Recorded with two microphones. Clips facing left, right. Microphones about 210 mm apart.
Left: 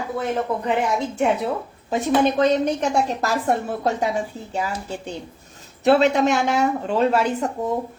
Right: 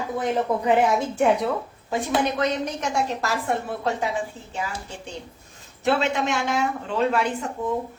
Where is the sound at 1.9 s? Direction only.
25° left (ahead or behind); by 7.7 s 40° left (ahead or behind).